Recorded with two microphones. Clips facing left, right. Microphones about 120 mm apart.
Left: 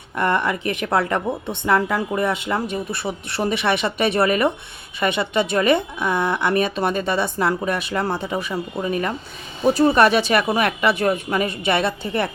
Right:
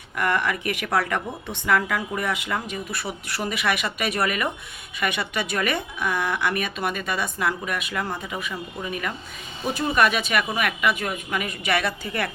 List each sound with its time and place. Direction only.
0.2 s a woman's voice: 25° left (ahead or behind)